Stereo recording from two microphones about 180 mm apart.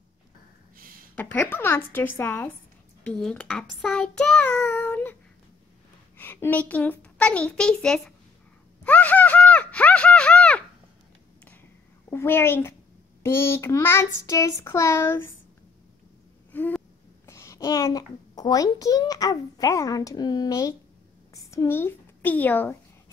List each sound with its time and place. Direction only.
1.1 s a child's voice: 10° left (ahead or behind)
3.0 s child singing: 5° left (ahead or behind)
6.1 s a child's voice: 10° left (ahead or behind)
8.8 s a sound: 10° left (ahead or behind)
12.1 s a child's voice: 15° left (ahead or behind)
16.5 s gasp: 10° left (ahead or behind)
17.3 s a child's voice: 15° left (ahead or behind)